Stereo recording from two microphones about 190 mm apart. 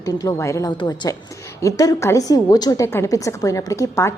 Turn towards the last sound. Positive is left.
turn(degrees=15)  # may be behind; listen again after turning